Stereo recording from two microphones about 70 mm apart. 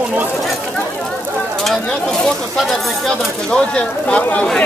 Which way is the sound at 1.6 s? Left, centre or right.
Centre.